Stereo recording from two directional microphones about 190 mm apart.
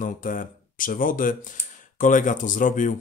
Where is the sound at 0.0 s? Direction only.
45° left (ahead or behind).